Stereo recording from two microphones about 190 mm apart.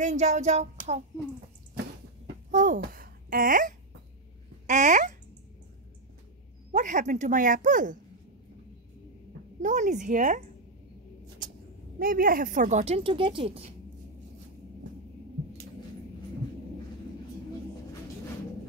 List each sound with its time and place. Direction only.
0.0 s speech: 40° right (ahead or behind)
2.5 s speech: 45° right (ahead or behind)
6.7 s speech: 40° right (ahead or behind)
9.6 s speech: 40° right (ahead or behind)
12.0 s speech: 50° right (ahead or behind); by 13.7 s 30° right (ahead or behind)